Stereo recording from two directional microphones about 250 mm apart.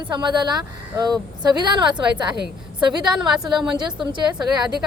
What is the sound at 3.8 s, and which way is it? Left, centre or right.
Speech, centre.